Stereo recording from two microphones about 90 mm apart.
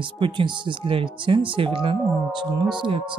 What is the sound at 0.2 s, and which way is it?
Speech, 80° right.